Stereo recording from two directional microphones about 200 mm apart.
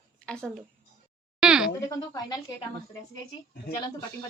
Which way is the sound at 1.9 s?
20° left (ahead or behind).